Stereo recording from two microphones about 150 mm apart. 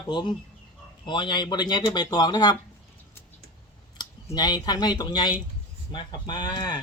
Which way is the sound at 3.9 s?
30° left (ahead or behind).